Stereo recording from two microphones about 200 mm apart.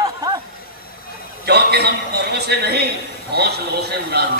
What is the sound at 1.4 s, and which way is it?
Speech, 55° right (ahead or behind).